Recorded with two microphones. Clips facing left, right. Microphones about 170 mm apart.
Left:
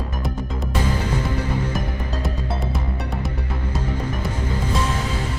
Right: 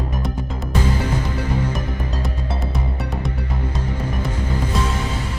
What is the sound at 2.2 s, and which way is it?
Music, centre (ahead or behind).